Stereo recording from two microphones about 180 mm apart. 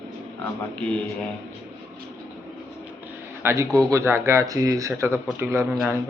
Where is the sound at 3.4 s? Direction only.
15° right (ahead or behind).